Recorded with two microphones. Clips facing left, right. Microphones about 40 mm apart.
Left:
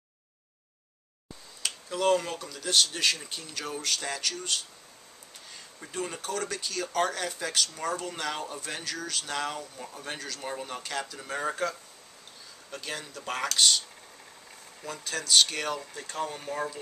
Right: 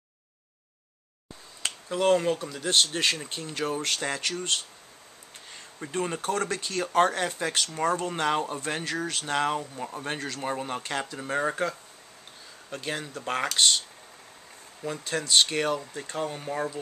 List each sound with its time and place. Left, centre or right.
1.6 s speech: right
12.7 s speech: right